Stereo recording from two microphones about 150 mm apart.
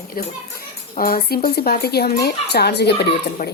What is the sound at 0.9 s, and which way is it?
Speech, 85° left.